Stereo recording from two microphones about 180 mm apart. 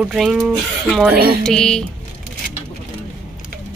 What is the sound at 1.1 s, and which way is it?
Music, 60° right (ahead or behind).